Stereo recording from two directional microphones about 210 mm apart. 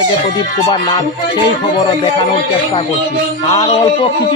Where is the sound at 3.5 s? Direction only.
25° left (ahead or behind).